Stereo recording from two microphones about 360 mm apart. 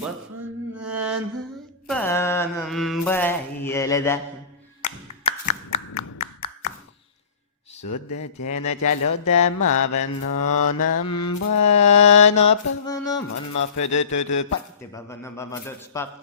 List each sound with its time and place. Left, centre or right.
0.8 s mantra: centre
4.8 s clapping: centre
5.7 s tap: left
6.1 s tap: centre
7.9 s speech: left
9.6 s mantra: left
11.0 s a man's voice: centre
11.4 s speech: left
12.5 s a man's voice: centre
13.7 s speech: left
14.8 s a man's voice: centre